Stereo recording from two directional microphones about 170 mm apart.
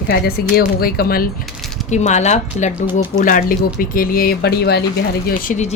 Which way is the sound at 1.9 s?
45° left (ahead or behind).